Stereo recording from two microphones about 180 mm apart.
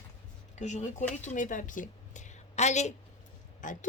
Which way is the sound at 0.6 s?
40° left (ahead or behind).